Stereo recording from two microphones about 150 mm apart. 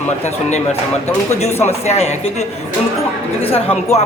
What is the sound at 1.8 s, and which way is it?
Speech, 45° left (ahead or behind).